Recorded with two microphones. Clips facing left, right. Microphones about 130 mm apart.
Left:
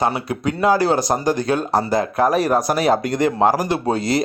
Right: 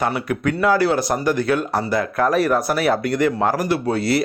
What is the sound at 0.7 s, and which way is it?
Speech, 35° left (ahead or behind).